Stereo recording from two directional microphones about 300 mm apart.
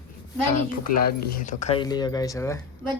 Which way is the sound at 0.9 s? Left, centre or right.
Left.